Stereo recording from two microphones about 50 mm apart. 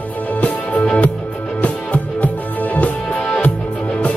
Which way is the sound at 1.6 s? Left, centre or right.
Left.